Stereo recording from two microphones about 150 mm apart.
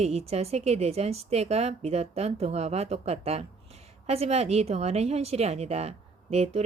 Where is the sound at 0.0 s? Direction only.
45° right (ahead or behind).